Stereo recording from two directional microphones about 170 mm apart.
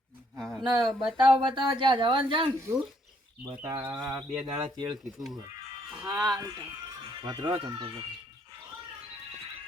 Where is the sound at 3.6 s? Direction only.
20° right (ahead or behind).